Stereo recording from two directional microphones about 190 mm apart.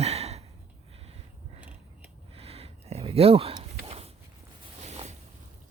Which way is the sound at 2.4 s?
30° right (ahead or behind).